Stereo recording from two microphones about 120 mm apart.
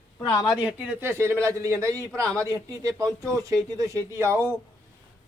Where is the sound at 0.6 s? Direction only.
10° right (ahead or behind).